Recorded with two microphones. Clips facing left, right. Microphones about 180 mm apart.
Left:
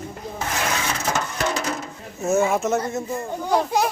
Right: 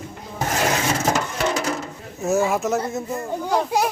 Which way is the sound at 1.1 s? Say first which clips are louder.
Right 2 dB; 15° right (ahead or behind).